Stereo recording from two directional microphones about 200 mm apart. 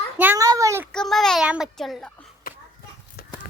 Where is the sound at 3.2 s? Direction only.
50° left (ahead or behind).